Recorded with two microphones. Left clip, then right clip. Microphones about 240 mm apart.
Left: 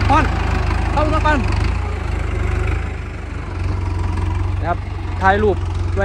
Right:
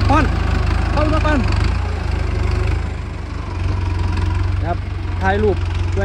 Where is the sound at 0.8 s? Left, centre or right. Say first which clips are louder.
Left 1 dB; centre.